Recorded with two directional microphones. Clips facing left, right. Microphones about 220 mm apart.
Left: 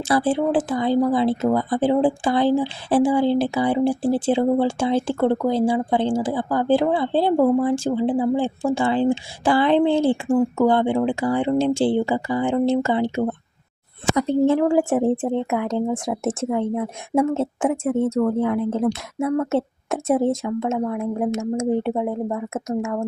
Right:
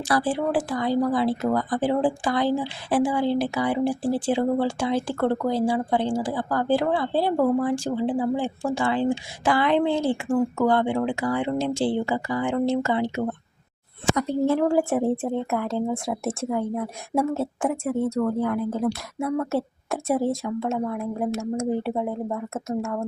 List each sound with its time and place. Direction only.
0.0 s a woman's voice: 25° left (ahead or behind)
20.7 s speech: 10° left (ahead or behind)
21.9 s speech: 5° left (ahead or behind)